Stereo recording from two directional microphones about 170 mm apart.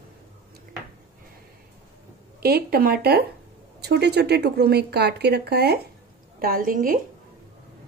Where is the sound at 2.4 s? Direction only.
65° right (ahead or behind).